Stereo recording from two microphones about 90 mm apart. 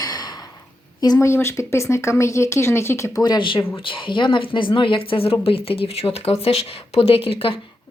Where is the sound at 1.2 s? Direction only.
30° left (ahead or behind).